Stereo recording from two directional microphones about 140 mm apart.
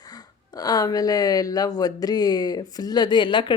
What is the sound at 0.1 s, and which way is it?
Speech, 30° left (ahead or behind).